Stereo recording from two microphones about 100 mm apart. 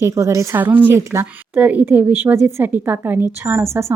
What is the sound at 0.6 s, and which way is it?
A woman's voice, 20° right (ahead or behind).